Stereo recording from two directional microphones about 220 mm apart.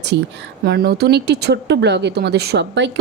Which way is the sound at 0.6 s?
45° right (ahead or behind).